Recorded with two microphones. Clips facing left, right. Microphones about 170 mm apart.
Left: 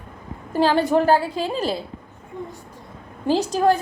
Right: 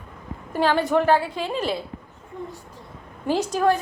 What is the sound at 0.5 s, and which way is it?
A woman's voice, 35° left (ahead or behind).